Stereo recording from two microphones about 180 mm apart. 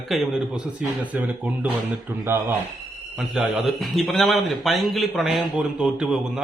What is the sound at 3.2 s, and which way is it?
A man's voice, centre (ahead or behind).